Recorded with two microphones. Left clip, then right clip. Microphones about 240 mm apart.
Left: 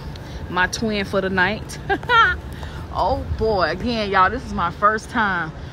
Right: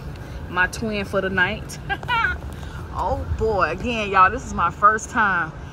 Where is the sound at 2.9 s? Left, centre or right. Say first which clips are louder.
Left 4 dB; centre.